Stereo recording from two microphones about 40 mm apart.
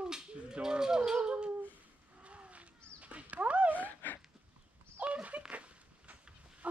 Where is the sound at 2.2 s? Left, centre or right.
Right.